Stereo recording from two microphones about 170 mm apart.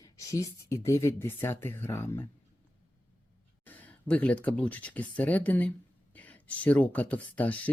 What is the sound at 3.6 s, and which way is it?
Speech, 10° left (ahead or behind).